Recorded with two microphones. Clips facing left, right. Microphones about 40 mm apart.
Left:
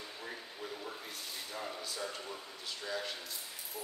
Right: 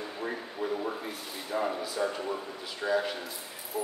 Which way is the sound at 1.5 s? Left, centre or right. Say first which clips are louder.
Right 13 dB; right.